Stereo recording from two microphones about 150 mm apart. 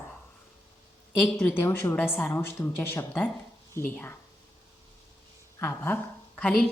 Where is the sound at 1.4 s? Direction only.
15° left (ahead or behind).